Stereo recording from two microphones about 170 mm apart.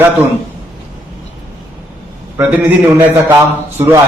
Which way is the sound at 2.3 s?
10° right (ahead or behind).